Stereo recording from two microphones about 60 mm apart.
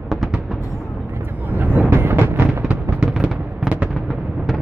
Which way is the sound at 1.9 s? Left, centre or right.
Right.